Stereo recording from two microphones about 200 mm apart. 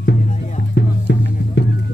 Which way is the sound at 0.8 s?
60° left (ahead or behind).